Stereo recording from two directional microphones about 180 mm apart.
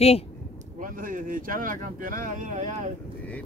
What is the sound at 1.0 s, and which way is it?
Speech, 50° right (ahead or behind).